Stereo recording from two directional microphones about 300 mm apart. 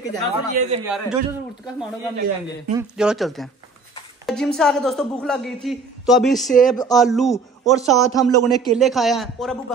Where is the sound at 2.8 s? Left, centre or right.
Centre.